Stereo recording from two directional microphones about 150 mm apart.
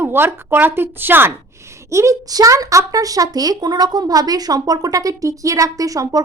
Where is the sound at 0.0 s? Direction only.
15° right (ahead or behind).